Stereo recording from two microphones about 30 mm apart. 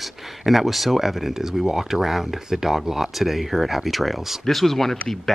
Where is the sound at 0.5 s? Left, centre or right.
Centre.